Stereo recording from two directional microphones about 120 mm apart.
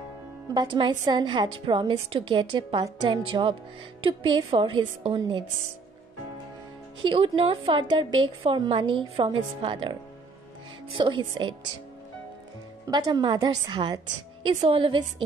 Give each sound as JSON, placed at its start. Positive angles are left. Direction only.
{"t": 0.6, "sound": "a woman's voice", "side_deg": -40}
{"t": 7.0, "sound": "a woman's voice", "side_deg": -45}
{"t": 13.1, "sound": "a woman's voice", "side_deg": -35}